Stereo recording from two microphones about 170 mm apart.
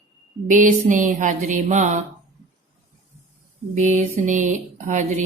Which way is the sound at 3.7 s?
45° right (ahead or behind).